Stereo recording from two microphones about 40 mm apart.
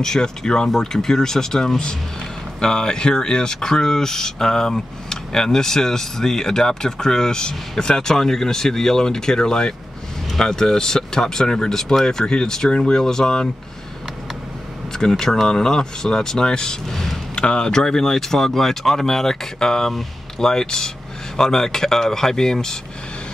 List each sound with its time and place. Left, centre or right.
0.0 s speech: centre
14.9 s speech: centre
16.9 s a sound: centre
17.4 s speech: left